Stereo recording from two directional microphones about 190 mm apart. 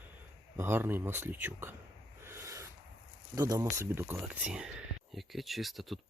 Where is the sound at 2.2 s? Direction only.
15° right (ahead or behind).